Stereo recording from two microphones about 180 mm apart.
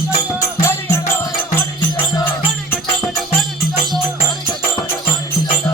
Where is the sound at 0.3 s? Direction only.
15° left (ahead or behind).